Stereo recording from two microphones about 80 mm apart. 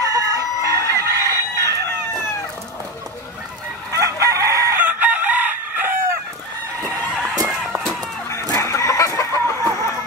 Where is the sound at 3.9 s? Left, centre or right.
Right.